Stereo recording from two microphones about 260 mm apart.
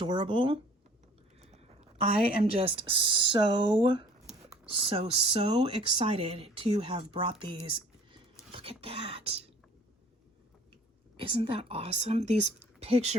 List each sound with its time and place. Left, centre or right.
0.0 s speech: centre
1.4 s a sound: right
2.4 s speech: right
11.2 s speech: right